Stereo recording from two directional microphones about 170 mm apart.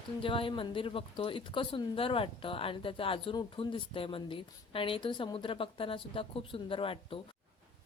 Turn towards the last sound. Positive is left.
turn(degrees=30)  # may be behind; listen again after turning